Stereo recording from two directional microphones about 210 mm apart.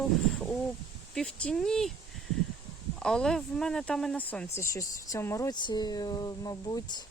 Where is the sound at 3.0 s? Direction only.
5° left (ahead or behind).